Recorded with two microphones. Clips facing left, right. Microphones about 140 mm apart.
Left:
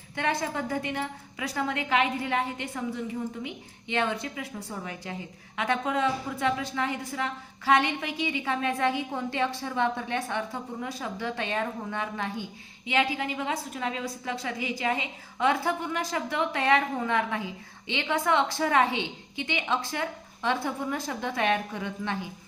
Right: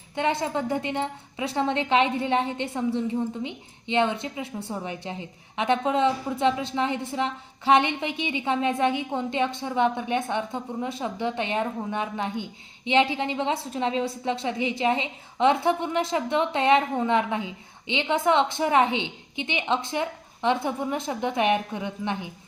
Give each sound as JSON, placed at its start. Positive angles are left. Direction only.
{"t": 0.2, "sound": "a woman's voice", "side_deg": -20}